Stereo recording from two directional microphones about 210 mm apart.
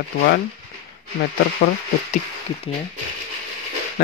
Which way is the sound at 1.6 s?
45° left (ahead or behind).